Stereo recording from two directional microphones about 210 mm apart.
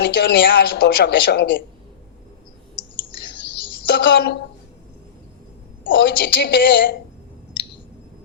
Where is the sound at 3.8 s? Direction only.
55° left (ahead or behind).